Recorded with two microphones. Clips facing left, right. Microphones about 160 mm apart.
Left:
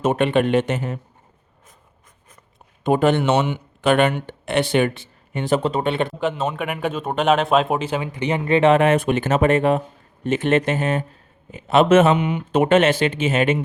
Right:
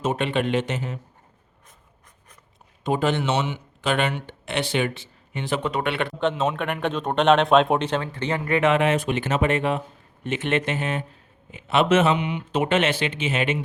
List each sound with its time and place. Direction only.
0.0 s speech: 55° left (ahead or behind)
2.8 s speech: 55° left (ahead or behind)
5.7 s speech: 25° left (ahead or behind)
6.1 s speech: 5° left (ahead or behind); by 8.7 s 25° left (ahead or behind)
8.7 s speech: 50° left (ahead or behind)